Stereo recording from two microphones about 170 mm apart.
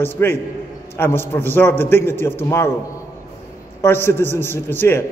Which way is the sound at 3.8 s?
15° left (ahead or behind).